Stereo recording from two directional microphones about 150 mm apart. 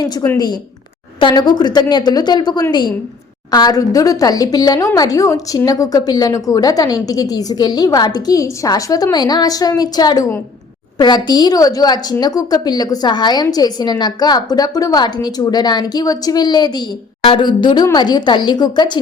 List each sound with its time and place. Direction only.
0.0 s a woman's voice: 25° left (ahead or behind)